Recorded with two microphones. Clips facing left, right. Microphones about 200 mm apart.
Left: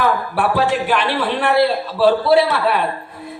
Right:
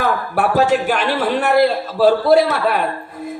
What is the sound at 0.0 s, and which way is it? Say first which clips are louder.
A man's voice: even; 45° right (ahead or behind).